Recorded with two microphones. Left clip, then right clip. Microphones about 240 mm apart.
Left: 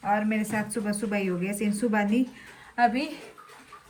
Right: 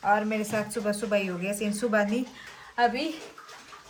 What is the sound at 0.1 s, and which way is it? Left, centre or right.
Speech, centre.